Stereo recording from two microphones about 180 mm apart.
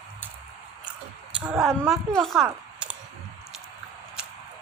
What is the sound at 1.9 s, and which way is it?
A woman's voice, centre (ahead or behind).